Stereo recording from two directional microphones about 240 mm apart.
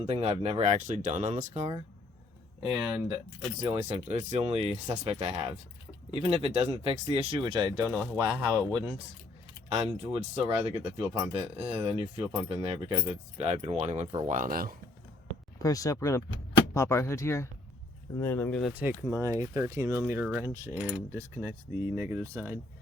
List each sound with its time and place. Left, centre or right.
0.0 s speech: right
2.6 s speech: centre
3.6 s speech: right
9.6 s speech: right
15.5 s speech: centre
18.7 s speech: centre